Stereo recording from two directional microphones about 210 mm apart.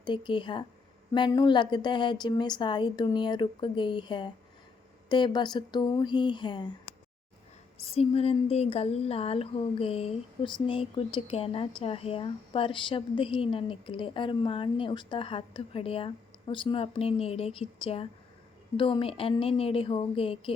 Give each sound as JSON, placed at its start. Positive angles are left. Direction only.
{"t": 0.0, "sound": "speech", "side_deg": 20}
{"t": 7.9, "sound": "speech", "side_deg": 30}